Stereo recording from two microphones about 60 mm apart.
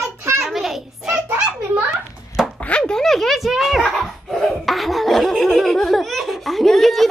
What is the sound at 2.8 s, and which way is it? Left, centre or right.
A woman's voice, centre.